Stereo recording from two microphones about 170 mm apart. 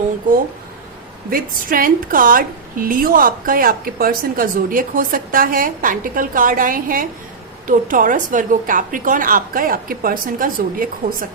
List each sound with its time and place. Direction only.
1.3 s a woman's voice: 55° right (ahead or behind)